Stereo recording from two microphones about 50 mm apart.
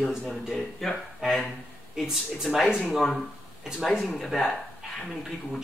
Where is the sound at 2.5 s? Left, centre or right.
Left.